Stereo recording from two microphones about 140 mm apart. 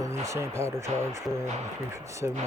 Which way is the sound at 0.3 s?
20° right (ahead or behind).